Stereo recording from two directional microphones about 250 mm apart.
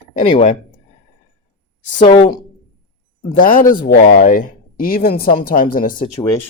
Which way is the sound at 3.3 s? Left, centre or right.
Left.